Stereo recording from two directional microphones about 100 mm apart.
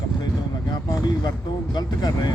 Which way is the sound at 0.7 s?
45° left (ahead or behind).